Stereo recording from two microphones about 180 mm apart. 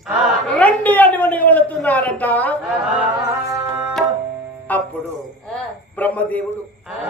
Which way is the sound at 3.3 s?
15° right (ahead or behind).